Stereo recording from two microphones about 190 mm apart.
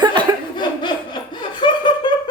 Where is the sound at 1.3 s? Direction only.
25° left (ahead or behind).